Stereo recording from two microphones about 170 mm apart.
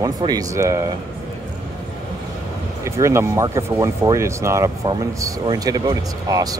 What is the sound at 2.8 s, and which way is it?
Speech, 15° right (ahead or behind).